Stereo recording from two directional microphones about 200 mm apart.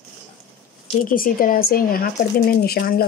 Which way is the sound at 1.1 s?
45° left (ahead or behind).